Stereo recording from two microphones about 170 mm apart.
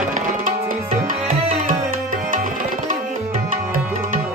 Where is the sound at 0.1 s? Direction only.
50° right (ahead or behind).